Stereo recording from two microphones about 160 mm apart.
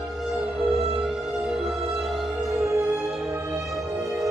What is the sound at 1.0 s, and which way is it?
Music, centre (ahead or behind).